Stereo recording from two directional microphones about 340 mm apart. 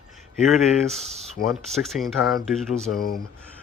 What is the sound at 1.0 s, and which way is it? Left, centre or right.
Speech, centre.